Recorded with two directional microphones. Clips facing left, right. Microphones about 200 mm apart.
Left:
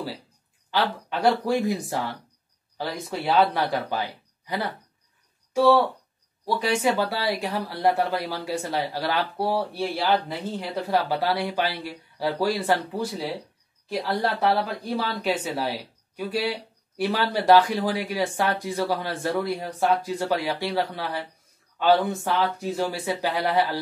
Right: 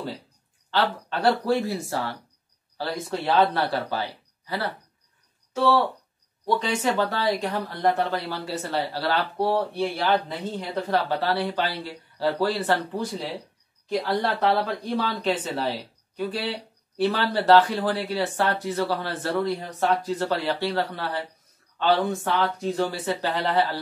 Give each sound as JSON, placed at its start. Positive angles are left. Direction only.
{"t": 0.7, "sound": "speech", "side_deg": 10}
{"t": 5.5, "sound": "speech", "side_deg": 10}